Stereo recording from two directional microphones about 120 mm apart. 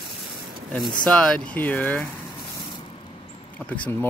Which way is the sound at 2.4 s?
40° left (ahead or behind).